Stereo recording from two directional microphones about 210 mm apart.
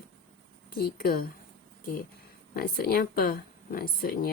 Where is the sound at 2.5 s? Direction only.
45° left (ahead or behind).